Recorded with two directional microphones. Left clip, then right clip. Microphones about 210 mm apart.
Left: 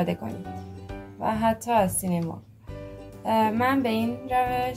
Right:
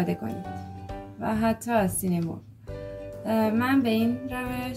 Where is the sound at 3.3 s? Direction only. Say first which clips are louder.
Left 3 dB; 25° left (ahead or behind).